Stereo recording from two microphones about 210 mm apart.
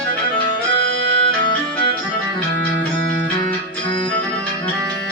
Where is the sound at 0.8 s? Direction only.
60° right (ahead or behind).